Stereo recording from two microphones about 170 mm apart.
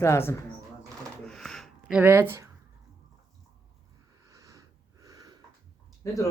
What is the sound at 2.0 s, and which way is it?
Speech, 15° right (ahead or behind).